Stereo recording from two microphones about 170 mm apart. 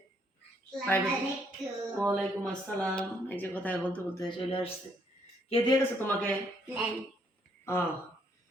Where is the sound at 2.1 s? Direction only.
5° left (ahead or behind).